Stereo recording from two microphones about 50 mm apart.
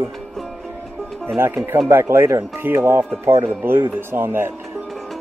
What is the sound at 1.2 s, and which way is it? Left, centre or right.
Speech, right.